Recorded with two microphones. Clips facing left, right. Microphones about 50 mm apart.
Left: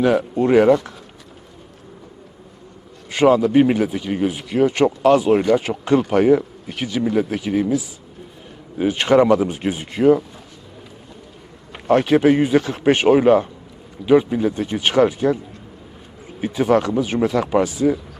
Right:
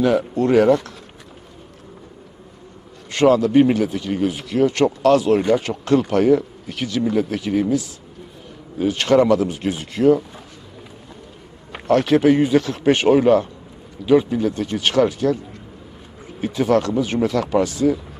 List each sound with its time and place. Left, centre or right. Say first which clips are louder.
0.0 s a man's voice: left 1 dB; centre
3.1 s a man's voice: even; centre
11.9 s a man's voice: even; centre
16.4 s a man's voice: left 1 dB; centre